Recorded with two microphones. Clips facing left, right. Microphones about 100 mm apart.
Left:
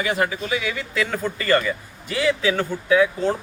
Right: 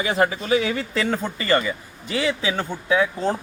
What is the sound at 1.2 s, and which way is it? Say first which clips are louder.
A man's voice: left 1 dB; 25° right (ahead or behind).